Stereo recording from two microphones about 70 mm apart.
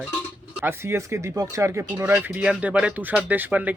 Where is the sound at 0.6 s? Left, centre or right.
Right.